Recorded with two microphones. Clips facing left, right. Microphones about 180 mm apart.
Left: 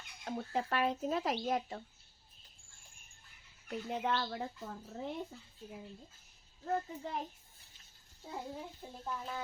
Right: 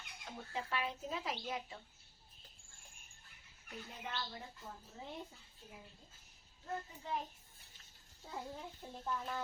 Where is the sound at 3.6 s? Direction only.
70° left (ahead or behind).